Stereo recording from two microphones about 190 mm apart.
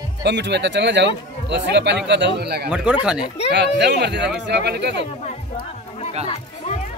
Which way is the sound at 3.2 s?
35° left (ahead or behind).